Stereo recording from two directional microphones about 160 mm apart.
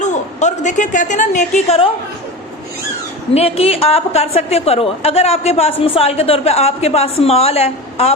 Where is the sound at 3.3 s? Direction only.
40° left (ahead or behind).